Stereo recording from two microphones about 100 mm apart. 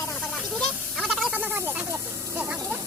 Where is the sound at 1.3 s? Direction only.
15° right (ahead or behind).